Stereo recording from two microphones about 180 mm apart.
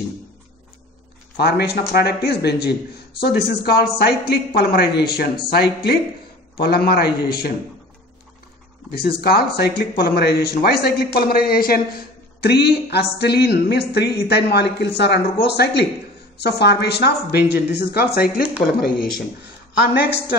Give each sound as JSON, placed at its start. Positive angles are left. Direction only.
{"t": 1.3, "sound": "speech", "side_deg": 65}
{"t": 8.9, "sound": "speech", "side_deg": 60}